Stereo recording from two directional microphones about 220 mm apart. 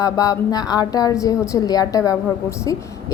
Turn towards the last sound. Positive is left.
turn(degrees=15)  # may be behind; listen again after turning